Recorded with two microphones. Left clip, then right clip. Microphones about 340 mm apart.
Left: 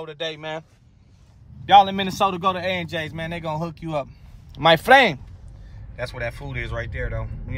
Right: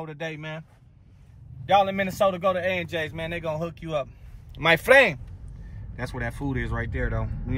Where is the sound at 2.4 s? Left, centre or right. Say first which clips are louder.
Left 1 dB; centre.